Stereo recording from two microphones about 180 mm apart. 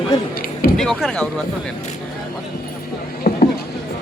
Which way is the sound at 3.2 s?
55° left (ahead or behind).